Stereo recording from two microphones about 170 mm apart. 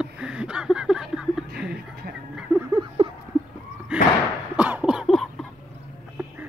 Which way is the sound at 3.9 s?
5° right (ahead or behind).